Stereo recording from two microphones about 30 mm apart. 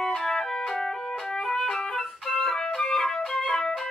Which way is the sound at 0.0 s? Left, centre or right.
Centre.